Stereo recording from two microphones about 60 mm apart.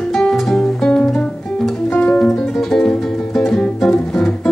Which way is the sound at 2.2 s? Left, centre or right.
Centre.